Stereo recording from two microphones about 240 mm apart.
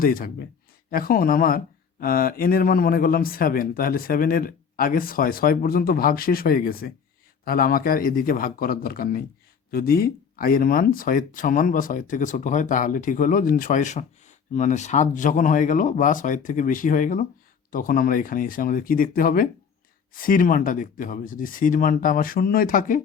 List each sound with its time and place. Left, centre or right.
0.0 s speech: left